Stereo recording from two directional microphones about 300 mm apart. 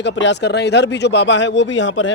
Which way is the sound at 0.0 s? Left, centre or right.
Left.